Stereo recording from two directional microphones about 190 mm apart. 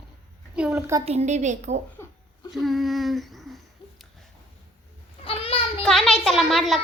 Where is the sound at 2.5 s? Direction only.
Centre (ahead or behind).